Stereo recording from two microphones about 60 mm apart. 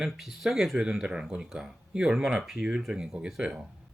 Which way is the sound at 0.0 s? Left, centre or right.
Centre.